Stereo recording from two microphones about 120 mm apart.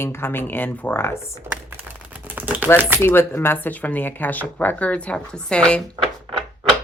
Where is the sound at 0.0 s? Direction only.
20° left (ahead or behind).